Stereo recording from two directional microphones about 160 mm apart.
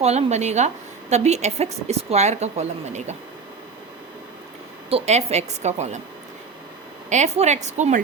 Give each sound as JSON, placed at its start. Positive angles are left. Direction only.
{"t": 0.0, "sound": "a woman's voice", "side_deg": -40}
{"t": 4.9, "sound": "a woman's voice", "side_deg": -40}
{"t": 7.1, "sound": "a woman's voice", "side_deg": -45}